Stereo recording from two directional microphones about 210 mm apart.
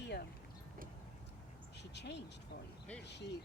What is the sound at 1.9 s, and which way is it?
Speech, 55° left (ahead or behind).